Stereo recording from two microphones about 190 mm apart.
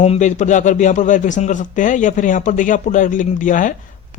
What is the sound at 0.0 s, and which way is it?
Speech, 40° left (ahead or behind).